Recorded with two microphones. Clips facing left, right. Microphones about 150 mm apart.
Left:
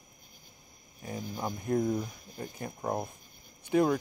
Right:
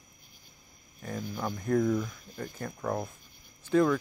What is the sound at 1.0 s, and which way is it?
Speech, 20° left (ahead or behind).